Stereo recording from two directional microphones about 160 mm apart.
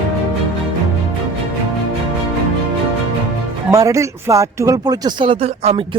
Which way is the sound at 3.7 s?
20° right (ahead or behind).